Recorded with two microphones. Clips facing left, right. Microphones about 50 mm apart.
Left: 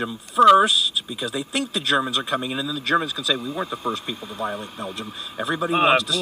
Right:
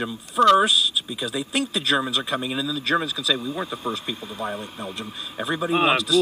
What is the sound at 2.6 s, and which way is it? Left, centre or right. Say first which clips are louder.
Speech: left 2 dB; left.